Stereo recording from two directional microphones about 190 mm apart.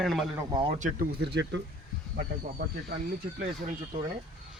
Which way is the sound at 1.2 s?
65° right (ahead or behind).